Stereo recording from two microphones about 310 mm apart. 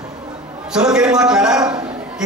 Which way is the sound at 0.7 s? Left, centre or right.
Centre.